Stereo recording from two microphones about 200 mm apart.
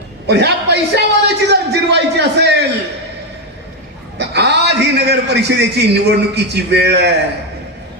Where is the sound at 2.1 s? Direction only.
60° right (ahead or behind).